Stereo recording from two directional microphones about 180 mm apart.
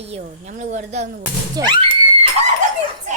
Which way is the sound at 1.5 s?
25° right (ahead or behind).